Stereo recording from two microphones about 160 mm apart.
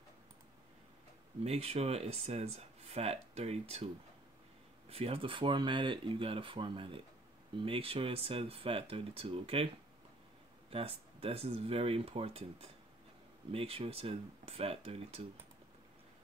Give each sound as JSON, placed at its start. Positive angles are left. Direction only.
{"t": 1.4, "sound": "speech", "side_deg": -40}
{"t": 10.7, "sound": "speech", "side_deg": -35}